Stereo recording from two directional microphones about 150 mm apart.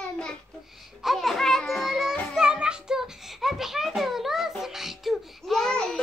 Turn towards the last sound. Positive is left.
turn(degrees=5)  # may be behind; listen again after turning